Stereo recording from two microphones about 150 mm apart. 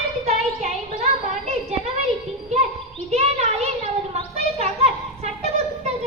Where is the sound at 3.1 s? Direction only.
45° right (ahead or behind).